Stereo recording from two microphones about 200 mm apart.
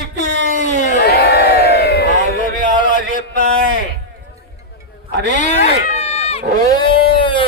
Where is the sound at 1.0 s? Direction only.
55° left (ahead or behind).